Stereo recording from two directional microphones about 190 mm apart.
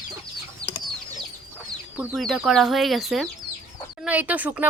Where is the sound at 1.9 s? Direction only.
10° right (ahead or behind).